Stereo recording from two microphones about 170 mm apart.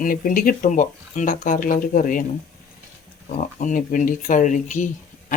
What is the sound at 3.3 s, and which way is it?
Speech, 50° left (ahead or behind).